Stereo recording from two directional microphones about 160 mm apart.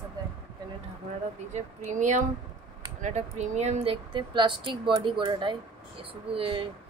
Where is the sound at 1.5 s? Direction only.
50° right (ahead or behind).